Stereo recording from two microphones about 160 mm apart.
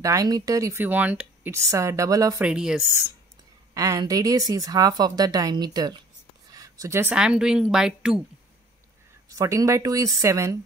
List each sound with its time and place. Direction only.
0.0 s speech: 20° right (ahead or behind)
2.4 s speech: 5° right (ahead or behind)
3.7 s speech: 20° right (ahead or behind)
6.5 s a sound: 20° right (ahead or behind)
7.2 s speech: 5° right (ahead or behind)
9.3 s speech: 20° right (ahead or behind)